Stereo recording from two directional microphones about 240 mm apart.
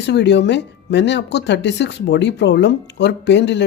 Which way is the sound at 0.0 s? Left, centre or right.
Left.